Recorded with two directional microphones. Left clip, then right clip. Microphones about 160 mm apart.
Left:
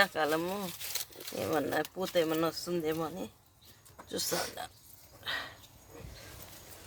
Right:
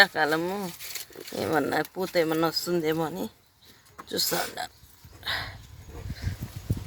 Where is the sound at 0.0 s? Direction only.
20° right (ahead or behind).